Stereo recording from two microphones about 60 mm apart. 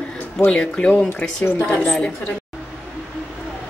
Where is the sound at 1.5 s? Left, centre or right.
Left.